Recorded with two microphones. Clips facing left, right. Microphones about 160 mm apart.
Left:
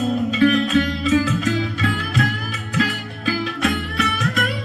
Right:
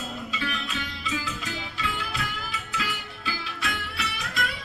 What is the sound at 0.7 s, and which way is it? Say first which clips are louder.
Music: left 16 dB; 80° left.